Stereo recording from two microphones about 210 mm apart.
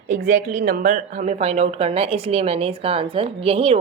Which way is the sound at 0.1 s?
40° right (ahead or behind).